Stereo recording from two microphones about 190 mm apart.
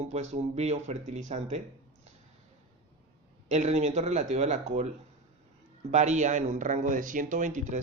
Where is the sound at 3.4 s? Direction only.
35° right (ahead or behind).